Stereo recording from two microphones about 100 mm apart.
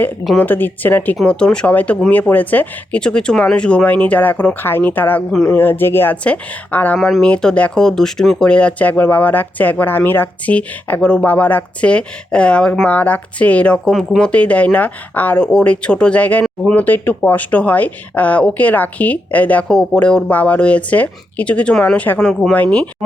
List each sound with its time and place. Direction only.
0.3 s speech: 20° left (ahead or behind)